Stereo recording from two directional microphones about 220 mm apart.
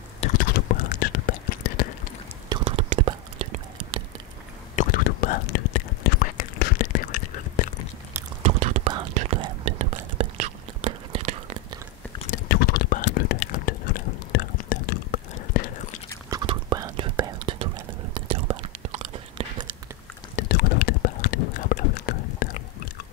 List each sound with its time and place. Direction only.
0.2 s whispering: 40° left (ahead or behind)
2.5 s whispering: 25° right (ahead or behind)
4.7 s whispering: 40° left (ahead or behind)
8.4 s whispering: 30° right (ahead or behind)
12.2 s whispering: 40° left (ahead or behind)
16.3 s whispering: 20° right (ahead or behind)
20.3 s whispering: 40° left (ahead or behind)